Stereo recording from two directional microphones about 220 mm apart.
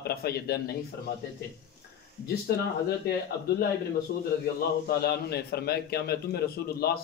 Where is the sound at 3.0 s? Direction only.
45° left (ahead or behind).